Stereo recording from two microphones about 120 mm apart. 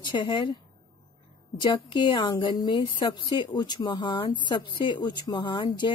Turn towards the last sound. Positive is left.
turn(degrees=40)  # may be behind; listen again after turning